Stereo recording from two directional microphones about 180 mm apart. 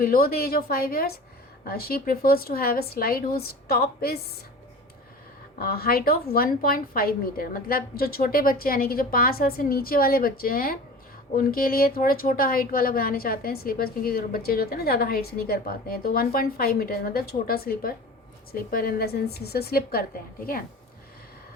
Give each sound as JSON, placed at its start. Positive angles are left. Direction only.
{"t": 0.0, "sound": "speech", "side_deg": 55}
{"t": 5.5, "sound": "speech", "side_deg": 55}